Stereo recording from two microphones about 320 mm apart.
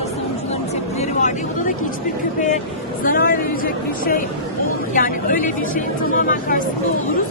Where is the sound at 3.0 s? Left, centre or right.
Left.